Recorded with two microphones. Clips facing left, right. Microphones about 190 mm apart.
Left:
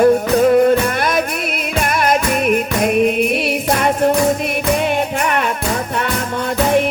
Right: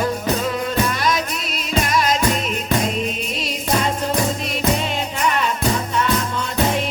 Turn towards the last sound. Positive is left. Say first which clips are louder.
# left 4 dB
turn(degrees=60)  # may be behind; listen again after turning